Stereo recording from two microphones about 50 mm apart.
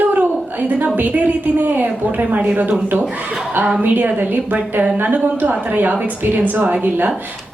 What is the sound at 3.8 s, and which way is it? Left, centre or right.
A woman's voice, right.